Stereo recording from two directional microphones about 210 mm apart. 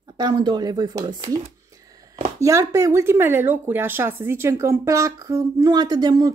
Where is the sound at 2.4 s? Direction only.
15° right (ahead or behind).